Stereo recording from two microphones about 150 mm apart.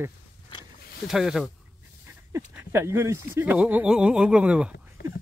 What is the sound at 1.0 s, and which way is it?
Speech, 5° right (ahead or behind).